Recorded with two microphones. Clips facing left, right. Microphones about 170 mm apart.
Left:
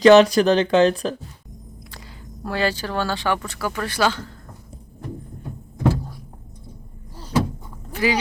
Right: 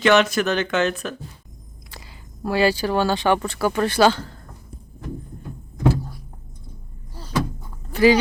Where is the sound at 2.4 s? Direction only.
10° right (ahead or behind); by 4.3 s 30° right (ahead or behind).